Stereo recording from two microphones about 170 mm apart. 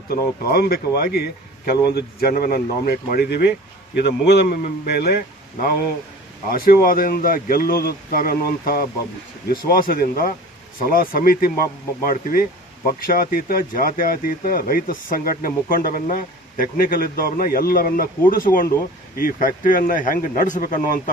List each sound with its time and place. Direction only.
0.1 s speech: 65° left (ahead or behind)
6.5 s speech: 60° left (ahead or behind)